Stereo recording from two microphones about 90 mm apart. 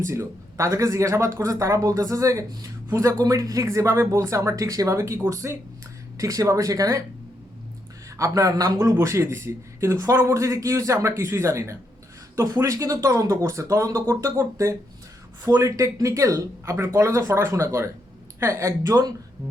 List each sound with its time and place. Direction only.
0.0 s speech: 35° right (ahead or behind)
8.1 s speech: 35° right (ahead or behind)
9.0 s speech: 30° right (ahead or behind)